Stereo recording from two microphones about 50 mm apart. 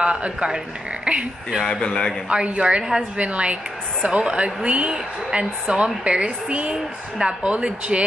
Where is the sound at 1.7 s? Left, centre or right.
Centre.